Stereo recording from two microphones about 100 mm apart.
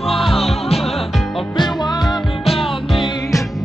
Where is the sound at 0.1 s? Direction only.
Centre (ahead or behind).